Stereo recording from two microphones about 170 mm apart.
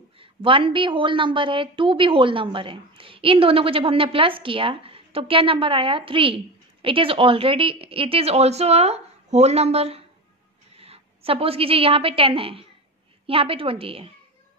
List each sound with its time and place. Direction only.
0.2 s a woman's voice: 30° right (ahead or behind)